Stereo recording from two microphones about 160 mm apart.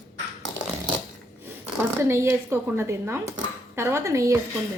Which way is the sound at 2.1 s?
15° right (ahead or behind).